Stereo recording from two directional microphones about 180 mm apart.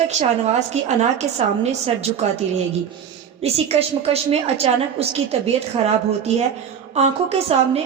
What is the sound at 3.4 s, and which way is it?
A woman's voice, 35° right (ahead or behind).